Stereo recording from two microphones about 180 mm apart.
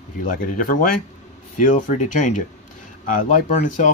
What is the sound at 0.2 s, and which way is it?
Speech, 50° left (ahead or behind).